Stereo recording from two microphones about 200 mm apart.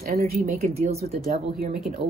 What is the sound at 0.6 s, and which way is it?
Speech, 30° right (ahead or behind).